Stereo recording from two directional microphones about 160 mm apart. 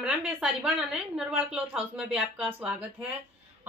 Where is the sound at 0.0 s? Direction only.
5° right (ahead or behind).